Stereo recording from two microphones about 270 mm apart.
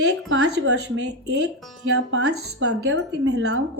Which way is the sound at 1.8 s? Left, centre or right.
Right.